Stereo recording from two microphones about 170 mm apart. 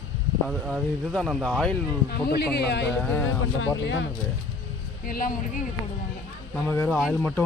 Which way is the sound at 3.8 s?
90° left.